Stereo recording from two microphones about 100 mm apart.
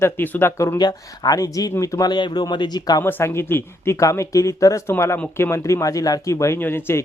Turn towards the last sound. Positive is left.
turn(degrees=25)  # may be behind; listen again after turning